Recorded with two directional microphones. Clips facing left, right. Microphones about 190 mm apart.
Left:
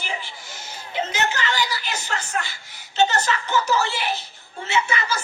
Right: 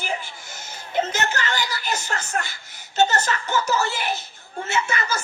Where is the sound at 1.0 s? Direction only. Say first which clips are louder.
Right 1 dB; 45° right (ahead or behind).